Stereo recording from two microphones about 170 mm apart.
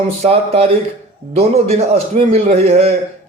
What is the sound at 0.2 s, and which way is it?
Speech, 35° right (ahead or behind).